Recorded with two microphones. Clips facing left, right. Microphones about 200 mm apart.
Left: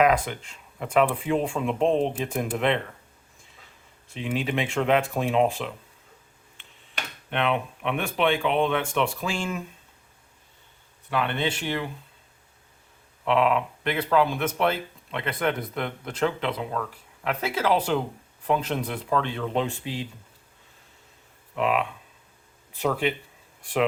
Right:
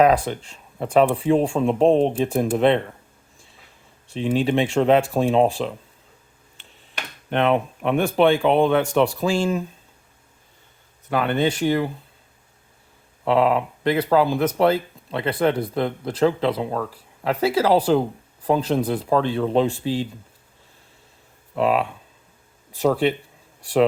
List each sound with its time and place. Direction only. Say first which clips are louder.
0.0 s speech: right 4 dB; 35° right (ahead or behind)
4.1 s speech: right 7 dB; 30° right (ahead or behind)
7.3 s speech: right 6 dB; 40° right (ahead or behind)
11.1 s speech: right 6 dB; 40° right (ahead or behind)
13.2 s speech: right 4 dB; 35° right (ahead or behind)
21.5 s speech: right 5 dB; 35° right (ahead or behind)